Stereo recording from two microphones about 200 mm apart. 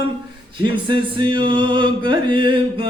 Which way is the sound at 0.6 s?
25° right (ahead or behind).